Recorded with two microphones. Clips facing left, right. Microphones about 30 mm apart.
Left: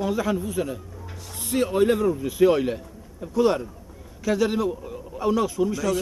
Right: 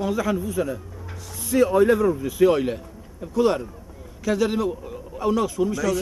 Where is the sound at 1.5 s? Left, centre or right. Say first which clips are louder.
Right 5 dB; right.